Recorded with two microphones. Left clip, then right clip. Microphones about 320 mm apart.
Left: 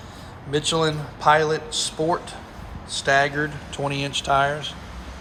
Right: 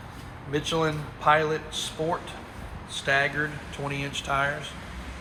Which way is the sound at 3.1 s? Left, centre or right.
Centre.